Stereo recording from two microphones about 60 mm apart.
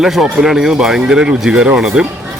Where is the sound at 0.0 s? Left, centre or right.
Centre.